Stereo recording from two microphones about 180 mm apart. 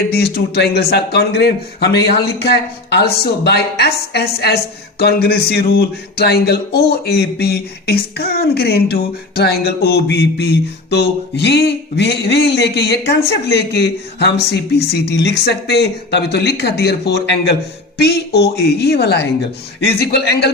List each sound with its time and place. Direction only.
0.1 s speech: 60° left (ahead or behind)